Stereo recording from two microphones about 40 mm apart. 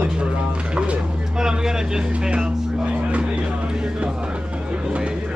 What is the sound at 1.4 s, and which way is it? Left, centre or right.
Speech, centre.